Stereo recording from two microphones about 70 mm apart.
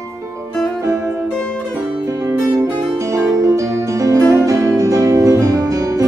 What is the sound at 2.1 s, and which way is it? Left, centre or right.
Music, right.